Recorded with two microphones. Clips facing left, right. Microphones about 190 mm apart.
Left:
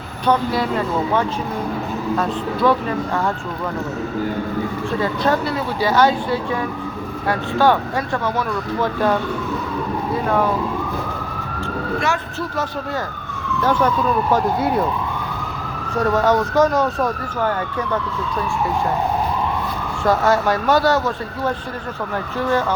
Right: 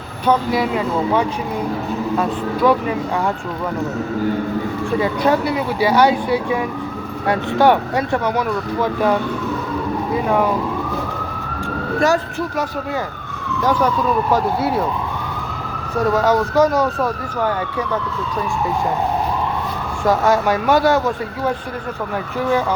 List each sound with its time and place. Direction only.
0.3 s speech: 10° right (ahead or behind)
2.6 s speech: 10° right (ahead or behind)
4.9 s speech: 15° right (ahead or behind)
11.9 s speech: 40° right (ahead or behind)
13.6 s speech: 10° right (ahead or behind)
16.0 s speech: 10° right (ahead or behind)
20.1 s speech: 10° right (ahead or behind)